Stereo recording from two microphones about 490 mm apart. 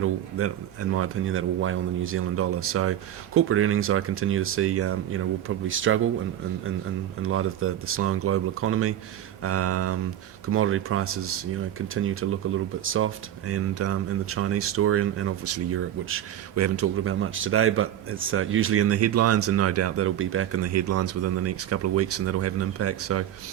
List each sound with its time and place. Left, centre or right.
0.0 s speech: right
7.2 s speech: right